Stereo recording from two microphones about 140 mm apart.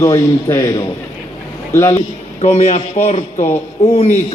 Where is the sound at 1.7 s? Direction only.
25° left (ahead or behind).